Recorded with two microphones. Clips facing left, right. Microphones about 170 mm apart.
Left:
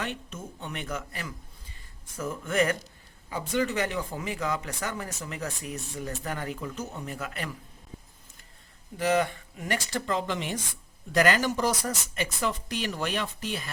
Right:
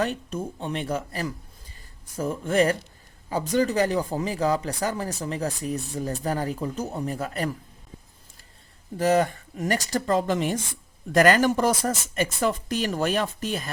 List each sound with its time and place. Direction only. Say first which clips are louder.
0.0 s speech: right 8 dB; 40° right (ahead or behind)
9.0 s speech: right 4 dB; 40° right (ahead or behind)